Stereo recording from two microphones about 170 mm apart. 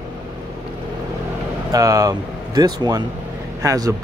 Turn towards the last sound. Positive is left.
turn(degrees=-20)  # may be behind; listen again after turning